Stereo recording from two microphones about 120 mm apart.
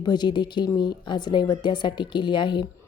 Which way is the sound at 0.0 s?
40° left (ahead or behind).